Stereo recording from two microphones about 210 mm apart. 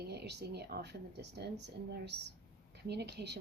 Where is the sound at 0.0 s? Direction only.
50° right (ahead or behind).